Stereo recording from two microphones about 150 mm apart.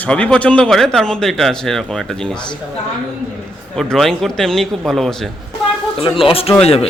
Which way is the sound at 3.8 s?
Centre (ahead or behind).